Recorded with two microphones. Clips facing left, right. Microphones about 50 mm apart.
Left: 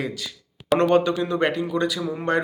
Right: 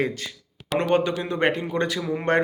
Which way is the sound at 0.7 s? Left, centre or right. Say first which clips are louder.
Left 3 dB; centre.